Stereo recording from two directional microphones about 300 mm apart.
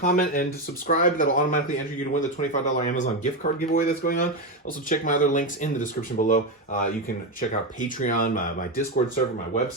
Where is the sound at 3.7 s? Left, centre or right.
Left.